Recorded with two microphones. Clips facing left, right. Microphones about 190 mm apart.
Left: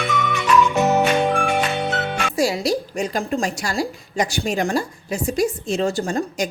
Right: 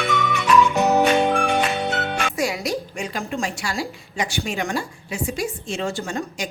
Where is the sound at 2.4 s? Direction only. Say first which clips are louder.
Left 7 dB; 35° left (ahead or behind).